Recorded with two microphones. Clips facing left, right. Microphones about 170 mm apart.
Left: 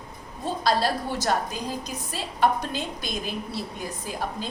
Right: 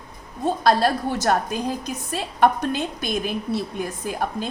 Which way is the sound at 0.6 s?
55° right (ahead or behind).